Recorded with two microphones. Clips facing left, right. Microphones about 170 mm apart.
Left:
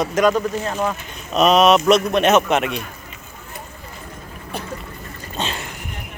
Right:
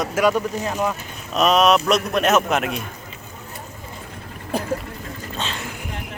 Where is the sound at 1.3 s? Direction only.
Centre (ahead or behind).